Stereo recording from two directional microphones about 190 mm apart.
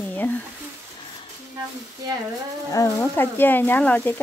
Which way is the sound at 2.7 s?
15° left (ahead or behind).